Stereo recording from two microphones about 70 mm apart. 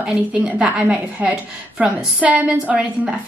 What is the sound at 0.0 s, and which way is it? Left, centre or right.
A woman's voice, centre.